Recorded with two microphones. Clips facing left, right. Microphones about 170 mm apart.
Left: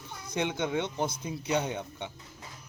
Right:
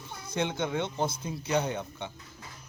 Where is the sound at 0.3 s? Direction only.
15° left (ahead or behind).